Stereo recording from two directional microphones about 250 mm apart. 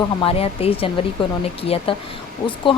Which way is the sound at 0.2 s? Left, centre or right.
Left.